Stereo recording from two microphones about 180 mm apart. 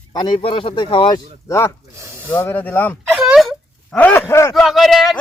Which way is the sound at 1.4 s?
15° left (ahead or behind).